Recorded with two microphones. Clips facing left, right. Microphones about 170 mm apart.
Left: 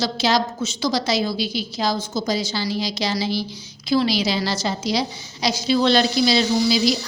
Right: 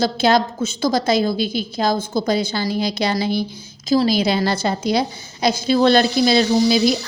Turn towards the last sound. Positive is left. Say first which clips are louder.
# right 3 dB
turn(degrees=-50)  # may be behind; listen again after turning